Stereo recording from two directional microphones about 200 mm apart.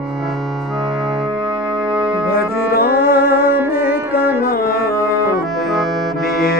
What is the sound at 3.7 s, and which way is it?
Music, 50° left (ahead or behind).